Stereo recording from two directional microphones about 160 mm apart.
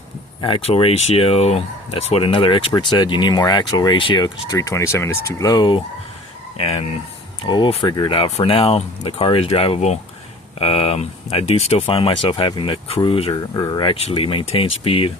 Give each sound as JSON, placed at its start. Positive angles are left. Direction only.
{"t": 0.4, "sound": "speech", "side_deg": 35}
{"t": 6.6, "sound": "speech", "side_deg": 40}
{"t": 7.4, "sound": "speech", "side_deg": 30}